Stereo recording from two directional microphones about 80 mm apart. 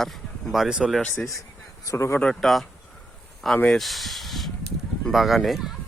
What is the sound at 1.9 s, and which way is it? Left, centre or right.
Speech, left.